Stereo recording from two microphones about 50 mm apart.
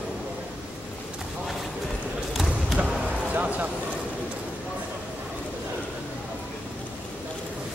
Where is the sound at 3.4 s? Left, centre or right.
Right.